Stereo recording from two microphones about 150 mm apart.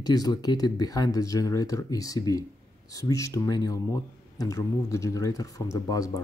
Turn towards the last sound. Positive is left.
turn(degrees=25)  # may be behind; listen again after turning